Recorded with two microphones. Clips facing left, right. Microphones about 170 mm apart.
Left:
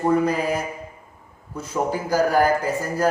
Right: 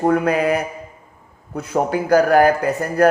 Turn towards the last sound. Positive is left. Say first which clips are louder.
# right 4 dB
turn(degrees=-65)  # may be behind; listen again after turning